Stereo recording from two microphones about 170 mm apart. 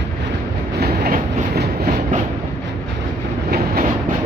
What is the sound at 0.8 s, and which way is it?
Train, 65° right (ahead or behind).